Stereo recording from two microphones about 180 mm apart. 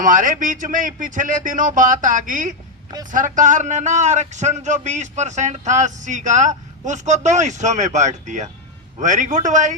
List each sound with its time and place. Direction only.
0.0 s speech: 45° right (ahead or behind)